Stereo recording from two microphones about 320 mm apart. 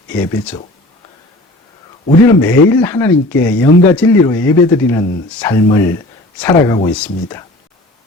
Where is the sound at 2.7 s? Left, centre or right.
Centre.